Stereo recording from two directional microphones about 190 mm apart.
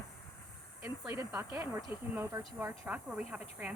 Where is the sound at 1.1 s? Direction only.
15° right (ahead or behind).